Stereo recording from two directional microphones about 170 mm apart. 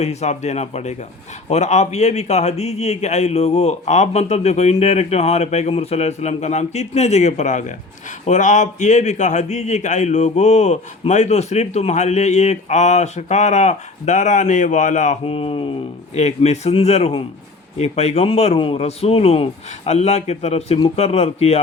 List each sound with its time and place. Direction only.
0.0 s a man's voice: 40° left (ahead or behind)